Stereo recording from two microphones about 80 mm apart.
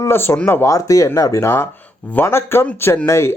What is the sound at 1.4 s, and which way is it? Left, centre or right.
Speech, left.